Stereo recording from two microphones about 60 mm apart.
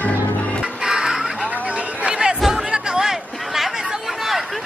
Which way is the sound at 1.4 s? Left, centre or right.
Right.